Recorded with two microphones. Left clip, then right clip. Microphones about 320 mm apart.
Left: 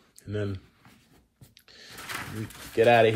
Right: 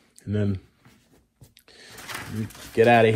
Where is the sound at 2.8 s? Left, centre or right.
Right.